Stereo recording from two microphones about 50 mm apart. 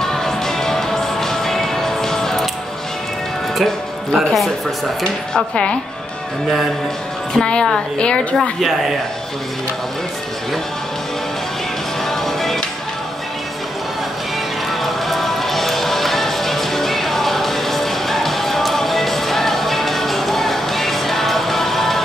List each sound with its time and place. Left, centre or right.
0.0 s music: centre
3.5 s speech: centre
5.3 s speech: centre
7.3 s a woman's voice: centre
8.4 s speech: centre
12.1 s music: centre
14.7 s music: centre